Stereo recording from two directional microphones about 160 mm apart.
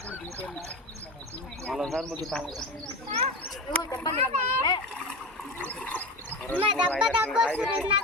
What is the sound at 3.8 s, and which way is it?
Speech, 25° left (ahead or behind).